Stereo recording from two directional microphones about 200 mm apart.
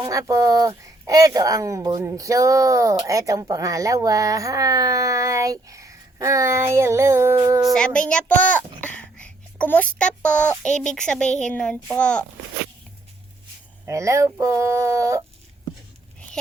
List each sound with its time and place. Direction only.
0.0 s speech: 15° right (ahead or behind)
7.6 s a child's voice: 5° left (ahead or behind)
13.8 s speech: 15° right (ahead or behind)